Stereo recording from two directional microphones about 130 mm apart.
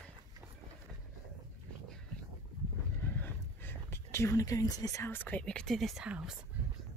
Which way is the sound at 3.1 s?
15° left (ahead or behind).